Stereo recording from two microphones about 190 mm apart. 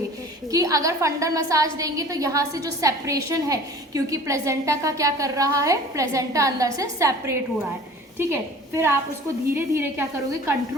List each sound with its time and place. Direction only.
0.5 s a woman's voice: 15° right (ahead or behind)